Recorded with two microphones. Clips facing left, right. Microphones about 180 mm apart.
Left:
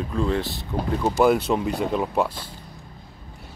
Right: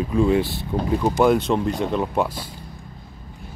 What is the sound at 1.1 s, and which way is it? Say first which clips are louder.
Speech: even; 5° left (ahead or behind).